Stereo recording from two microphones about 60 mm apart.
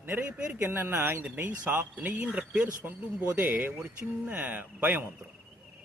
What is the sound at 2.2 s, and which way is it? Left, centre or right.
A man's voice, right.